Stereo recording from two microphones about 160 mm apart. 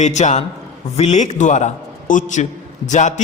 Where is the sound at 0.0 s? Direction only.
45° left (ahead or behind).